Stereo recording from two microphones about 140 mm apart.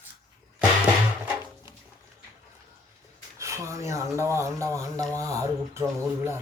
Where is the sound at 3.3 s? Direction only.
20° right (ahead or behind).